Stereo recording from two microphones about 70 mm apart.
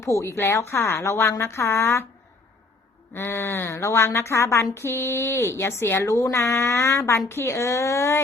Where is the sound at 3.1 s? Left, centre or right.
Left.